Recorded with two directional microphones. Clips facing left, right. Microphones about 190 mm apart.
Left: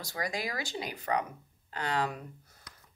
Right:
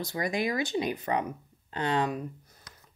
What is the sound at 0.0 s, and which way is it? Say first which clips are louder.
Speech: right 6 dB; 20° right (ahead or behind).